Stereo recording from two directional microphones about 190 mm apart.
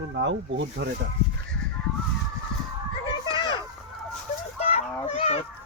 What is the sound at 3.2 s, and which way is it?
Children playing, 25° left (ahead or behind).